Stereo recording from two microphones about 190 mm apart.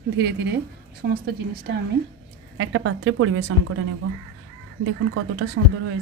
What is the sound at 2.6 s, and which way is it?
Speech, 90° right.